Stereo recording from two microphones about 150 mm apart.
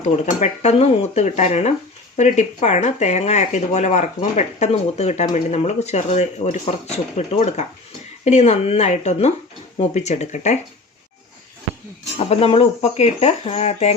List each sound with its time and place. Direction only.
0.0 s speech: 45° left (ahead or behind)
12.1 s speech: 40° left (ahead or behind)